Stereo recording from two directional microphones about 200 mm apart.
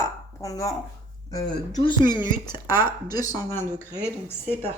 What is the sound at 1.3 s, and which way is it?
Speech, 20° left (ahead or behind).